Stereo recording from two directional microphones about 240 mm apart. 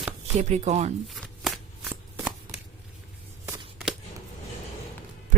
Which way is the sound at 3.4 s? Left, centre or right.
Centre.